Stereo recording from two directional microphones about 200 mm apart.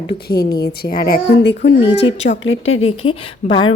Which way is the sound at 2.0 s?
65° left (ahead or behind).